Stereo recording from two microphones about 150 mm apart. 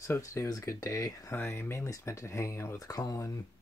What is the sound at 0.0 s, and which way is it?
Speech, 20° left (ahead or behind).